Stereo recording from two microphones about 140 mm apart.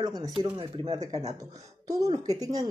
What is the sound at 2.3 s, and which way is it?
Speech, 25° right (ahead or behind).